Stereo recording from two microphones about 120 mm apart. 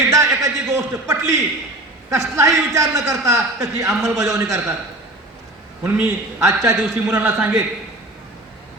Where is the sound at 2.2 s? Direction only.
25° right (ahead or behind).